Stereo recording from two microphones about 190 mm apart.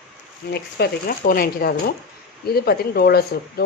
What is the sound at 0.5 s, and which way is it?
Speech, 55° left (ahead or behind).